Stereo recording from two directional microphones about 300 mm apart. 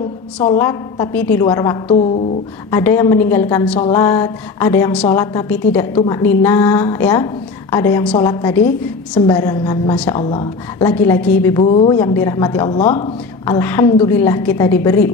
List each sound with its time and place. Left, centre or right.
0.6 s a woman's voice: centre
11.6 s a woman's voice: centre
13.5 s a woman's voice: centre